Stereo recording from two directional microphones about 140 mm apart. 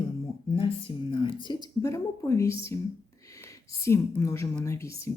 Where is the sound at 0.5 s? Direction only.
40° left (ahead or behind).